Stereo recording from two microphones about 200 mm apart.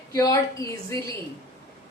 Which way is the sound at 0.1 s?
15° left (ahead or behind).